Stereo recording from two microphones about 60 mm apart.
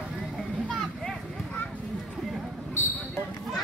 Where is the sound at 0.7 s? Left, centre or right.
Centre.